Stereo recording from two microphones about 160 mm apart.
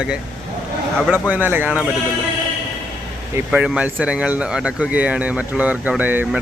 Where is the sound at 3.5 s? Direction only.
5° right (ahead or behind).